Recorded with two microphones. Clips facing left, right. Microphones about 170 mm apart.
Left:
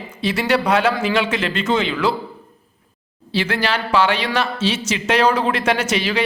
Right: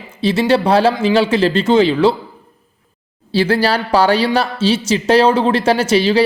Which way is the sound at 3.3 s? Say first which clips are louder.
Right 6 dB; 35° right (ahead or behind).